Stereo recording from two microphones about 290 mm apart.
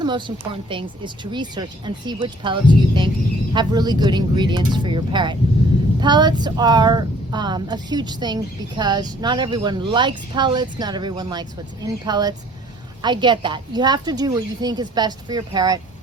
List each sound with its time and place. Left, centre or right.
0.0 s speech: centre